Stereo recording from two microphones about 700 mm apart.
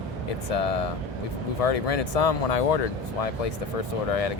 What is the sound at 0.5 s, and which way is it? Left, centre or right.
Speech, left.